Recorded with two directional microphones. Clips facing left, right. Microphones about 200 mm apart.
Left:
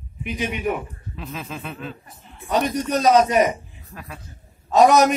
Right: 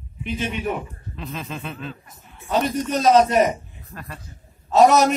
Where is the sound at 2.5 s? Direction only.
15° left (ahead or behind).